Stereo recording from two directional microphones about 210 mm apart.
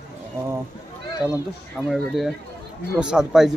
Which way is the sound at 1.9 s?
Centre (ahead or behind).